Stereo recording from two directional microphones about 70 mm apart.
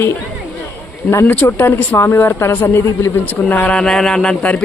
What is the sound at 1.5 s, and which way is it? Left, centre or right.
Speech, left.